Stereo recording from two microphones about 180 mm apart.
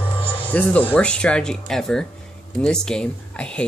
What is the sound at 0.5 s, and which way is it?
Speech, 10° left (ahead or behind).